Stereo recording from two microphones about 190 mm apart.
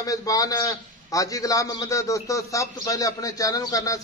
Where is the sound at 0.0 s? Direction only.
20° left (ahead or behind).